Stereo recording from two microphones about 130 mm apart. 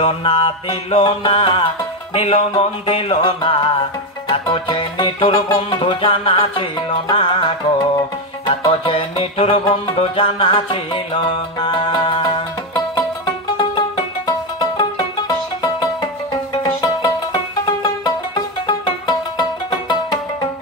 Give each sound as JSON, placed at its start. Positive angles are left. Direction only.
{"t": 0.0, "sound": "music", "side_deg": 45}